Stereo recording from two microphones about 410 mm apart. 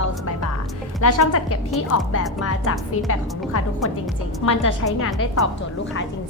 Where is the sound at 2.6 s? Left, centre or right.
Left.